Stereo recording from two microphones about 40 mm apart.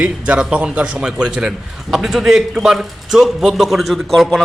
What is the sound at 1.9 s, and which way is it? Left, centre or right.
A man's voice, centre.